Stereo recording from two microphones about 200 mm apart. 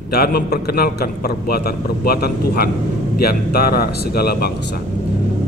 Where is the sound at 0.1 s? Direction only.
50° left (ahead or behind).